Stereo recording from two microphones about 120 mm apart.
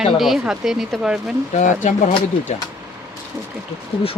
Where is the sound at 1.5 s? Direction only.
90° left.